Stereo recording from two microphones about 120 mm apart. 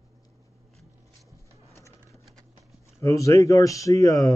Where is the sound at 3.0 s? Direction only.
25° left (ahead or behind).